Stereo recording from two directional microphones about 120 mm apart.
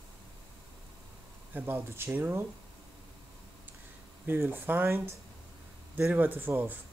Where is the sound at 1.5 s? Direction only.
15° right (ahead or behind).